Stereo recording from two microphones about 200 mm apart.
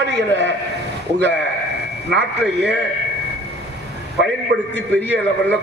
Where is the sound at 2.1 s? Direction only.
60° right (ahead or behind).